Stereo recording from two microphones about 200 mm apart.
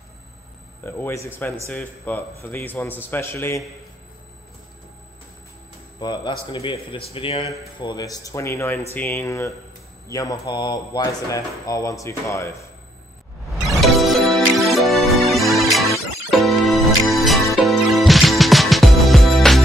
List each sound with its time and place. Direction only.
0.8 s speech: 10° left (ahead or behind)
5.9 s speech: 20° left (ahead or behind)
13.5 s music: centre (ahead or behind)